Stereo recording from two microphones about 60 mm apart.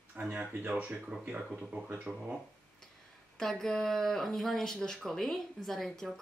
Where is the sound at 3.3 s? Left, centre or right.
Centre.